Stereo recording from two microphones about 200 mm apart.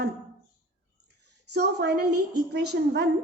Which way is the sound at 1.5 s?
55° right (ahead or behind).